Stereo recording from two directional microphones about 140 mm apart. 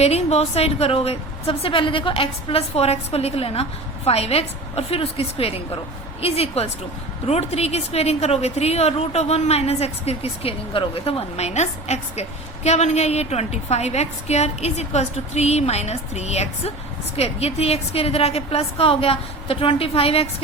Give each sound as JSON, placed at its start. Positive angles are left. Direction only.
{"t": 0.0, "sound": "a woman's voice", "side_deg": 50}